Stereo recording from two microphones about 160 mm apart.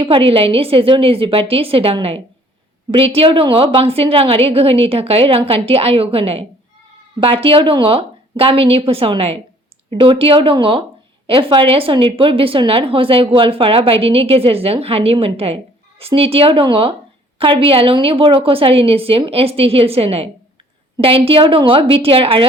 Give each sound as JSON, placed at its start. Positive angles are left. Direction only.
{"t": 0.0, "sound": "a woman's voice", "side_deg": -35}